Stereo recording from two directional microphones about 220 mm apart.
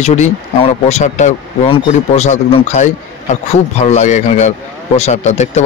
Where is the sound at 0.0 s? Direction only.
30° left (ahead or behind).